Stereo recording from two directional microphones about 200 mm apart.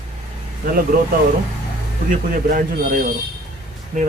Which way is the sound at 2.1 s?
45° right (ahead or behind).